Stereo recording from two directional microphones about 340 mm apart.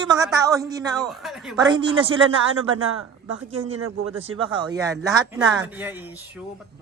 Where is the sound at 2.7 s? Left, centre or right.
Right.